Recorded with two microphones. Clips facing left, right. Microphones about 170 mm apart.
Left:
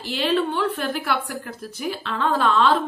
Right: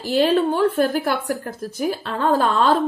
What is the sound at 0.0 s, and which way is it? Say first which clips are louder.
Speech: right 5 dB; 45° right (ahead or behind).